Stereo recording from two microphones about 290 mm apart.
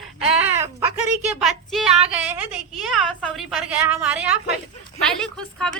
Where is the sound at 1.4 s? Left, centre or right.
Centre.